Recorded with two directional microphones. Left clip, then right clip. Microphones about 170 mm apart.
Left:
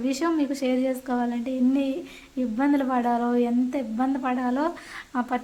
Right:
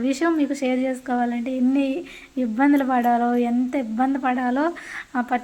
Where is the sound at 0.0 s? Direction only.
15° right (ahead or behind).